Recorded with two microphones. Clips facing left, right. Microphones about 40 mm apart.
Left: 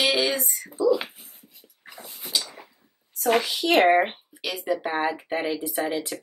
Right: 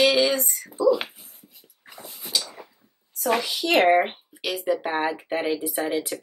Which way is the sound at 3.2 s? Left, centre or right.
Left.